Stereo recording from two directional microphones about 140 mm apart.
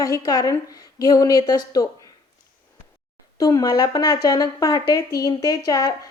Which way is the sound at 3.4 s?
25° left (ahead or behind).